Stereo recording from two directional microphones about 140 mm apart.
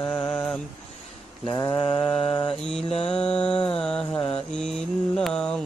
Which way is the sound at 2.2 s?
40° left (ahead or behind).